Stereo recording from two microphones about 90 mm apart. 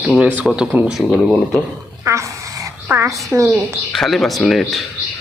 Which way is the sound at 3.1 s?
Centre (ahead or behind).